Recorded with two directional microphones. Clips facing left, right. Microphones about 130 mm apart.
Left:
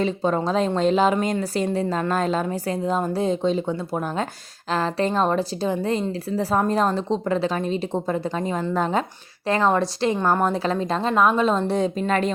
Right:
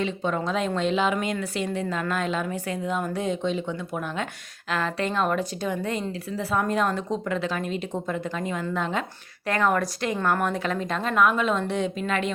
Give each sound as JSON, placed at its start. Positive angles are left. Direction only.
{"t": 0.0, "sound": "a woman's voice", "side_deg": 35}